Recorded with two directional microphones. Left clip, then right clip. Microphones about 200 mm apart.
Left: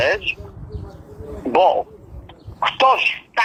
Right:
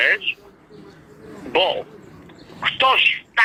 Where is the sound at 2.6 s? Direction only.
45° left (ahead or behind).